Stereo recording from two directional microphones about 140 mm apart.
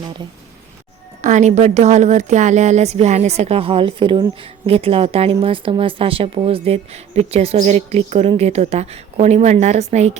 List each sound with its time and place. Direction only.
1.2 s speech: 60° right (ahead or behind)